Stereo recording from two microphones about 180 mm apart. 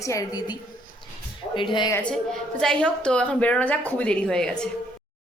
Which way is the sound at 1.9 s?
5° left (ahead or behind).